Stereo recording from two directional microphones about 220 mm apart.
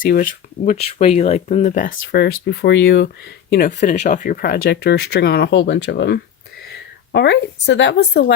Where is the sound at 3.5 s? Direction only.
40° left (ahead or behind).